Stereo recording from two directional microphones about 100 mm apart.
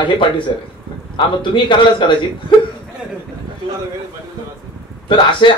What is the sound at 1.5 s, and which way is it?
Speech, 55° left (ahead or behind).